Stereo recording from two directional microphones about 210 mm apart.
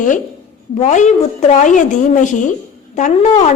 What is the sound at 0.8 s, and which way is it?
A woman's voice, 35° left (ahead or behind).